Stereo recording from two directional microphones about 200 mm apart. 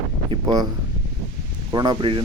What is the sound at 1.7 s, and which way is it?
Speech, 20° right (ahead or behind).